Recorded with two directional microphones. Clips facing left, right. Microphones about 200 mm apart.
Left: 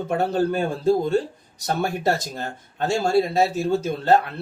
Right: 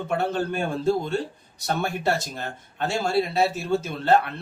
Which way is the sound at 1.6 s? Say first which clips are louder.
Left 2 dB; 40° left (ahead or behind).